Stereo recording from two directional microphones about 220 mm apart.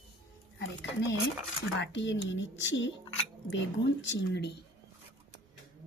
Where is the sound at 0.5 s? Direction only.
55° left (ahead or behind).